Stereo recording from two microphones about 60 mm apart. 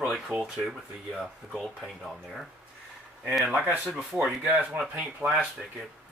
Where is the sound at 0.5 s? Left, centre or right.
Centre.